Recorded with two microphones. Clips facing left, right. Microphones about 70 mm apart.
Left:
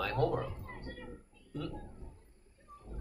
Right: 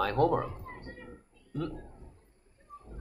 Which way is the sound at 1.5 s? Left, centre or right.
Right.